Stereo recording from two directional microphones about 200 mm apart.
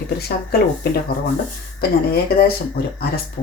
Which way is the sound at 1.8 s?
50° left (ahead or behind).